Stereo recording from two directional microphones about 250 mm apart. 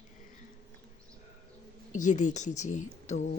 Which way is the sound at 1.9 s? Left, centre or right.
Left.